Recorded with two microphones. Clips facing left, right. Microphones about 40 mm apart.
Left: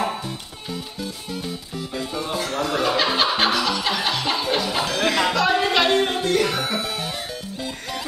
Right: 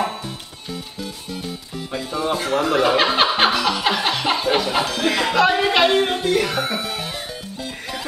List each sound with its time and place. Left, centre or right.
2.3 s speech: centre
3.8 s chuckle: centre
4.6 s music: centre
5.3 s a sound: centre
6.2 s music: centre